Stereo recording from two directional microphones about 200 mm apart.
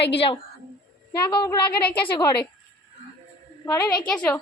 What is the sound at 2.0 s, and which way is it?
Speech, 20° left (ahead or behind).